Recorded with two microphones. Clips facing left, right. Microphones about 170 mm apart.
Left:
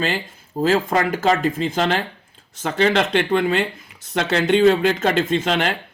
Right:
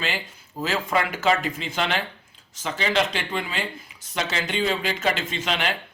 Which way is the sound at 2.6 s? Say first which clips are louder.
Left 6 dB; 55° left (ahead or behind).